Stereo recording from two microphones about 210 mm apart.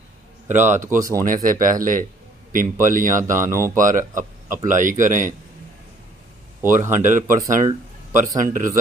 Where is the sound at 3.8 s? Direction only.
40° right (ahead or behind).